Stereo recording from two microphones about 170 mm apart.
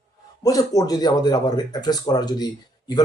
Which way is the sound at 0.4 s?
20° left (ahead or behind).